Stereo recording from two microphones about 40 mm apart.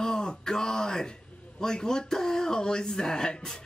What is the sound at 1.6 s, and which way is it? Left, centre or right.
Speech, centre.